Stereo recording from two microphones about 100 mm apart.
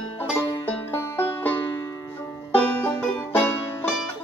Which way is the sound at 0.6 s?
20° left (ahead or behind).